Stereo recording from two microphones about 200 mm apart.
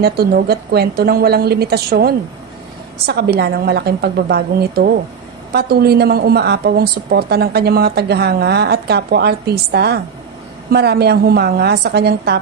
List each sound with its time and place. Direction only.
0.0 s a woman's voice: 50° right (ahead or behind)